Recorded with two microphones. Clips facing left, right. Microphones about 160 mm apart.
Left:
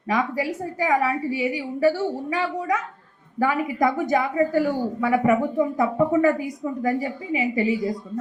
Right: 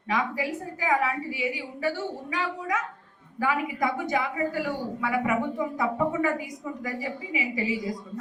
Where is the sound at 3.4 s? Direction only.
45° left (ahead or behind).